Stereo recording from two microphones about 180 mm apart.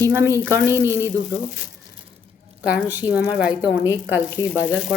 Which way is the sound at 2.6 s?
10° right (ahead or behind).